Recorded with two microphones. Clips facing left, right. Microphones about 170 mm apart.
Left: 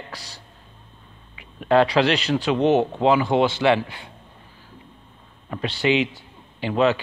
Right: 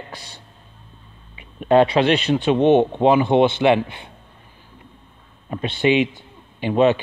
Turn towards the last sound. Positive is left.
turn(degrees=-20)  # may be behind; listen again after turning